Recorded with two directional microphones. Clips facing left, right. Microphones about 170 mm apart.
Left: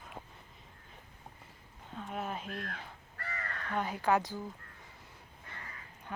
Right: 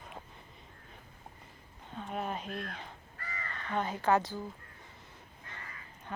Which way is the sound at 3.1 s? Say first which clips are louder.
Left 3 dB; 65° left (ahead or behind).